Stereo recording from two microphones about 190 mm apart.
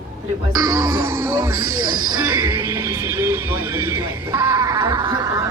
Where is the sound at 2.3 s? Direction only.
10° right (ahead or behind).